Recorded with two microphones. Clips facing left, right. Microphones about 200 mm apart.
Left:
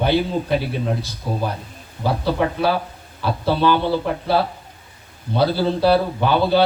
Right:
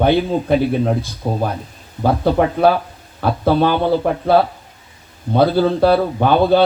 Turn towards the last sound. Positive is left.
turn(degrees=-50)  # may be behind; listen again after turning